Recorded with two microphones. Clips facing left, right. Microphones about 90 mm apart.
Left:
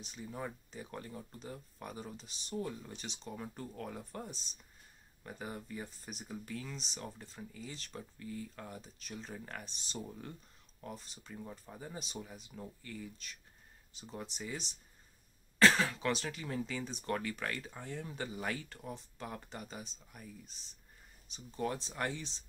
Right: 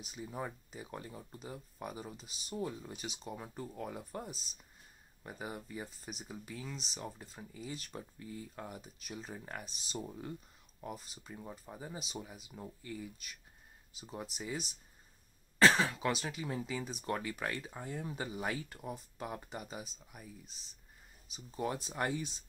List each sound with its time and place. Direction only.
0.0 s speech: 10° right (ahead or behind)
7.2 s speech: 15° right (ahead or behind)
15.7 s speech: 20° right (ahead or behind)
16.1 s speech: 10° right (ahead or behind)